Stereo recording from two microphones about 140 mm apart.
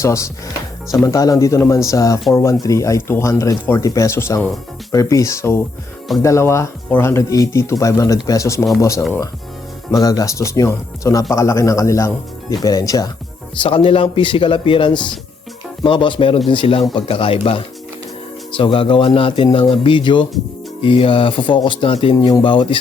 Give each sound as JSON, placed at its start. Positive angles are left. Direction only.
{"t": 0.0, "sound": "speech", "side_deg": 20}
{"t": 13.6, "sound": "speech", "side_deg": 40}